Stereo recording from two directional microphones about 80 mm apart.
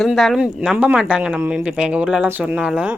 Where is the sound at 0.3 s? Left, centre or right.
Centre.